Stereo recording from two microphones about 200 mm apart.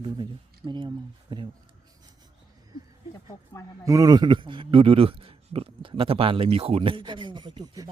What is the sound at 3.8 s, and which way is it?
A man's voice, 15° right (ahead or behind).